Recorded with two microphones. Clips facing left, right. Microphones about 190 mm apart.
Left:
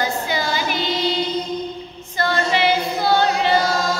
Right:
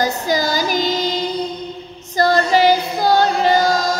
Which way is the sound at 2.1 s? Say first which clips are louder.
Right 6 dB; 40° right (ahead or behind).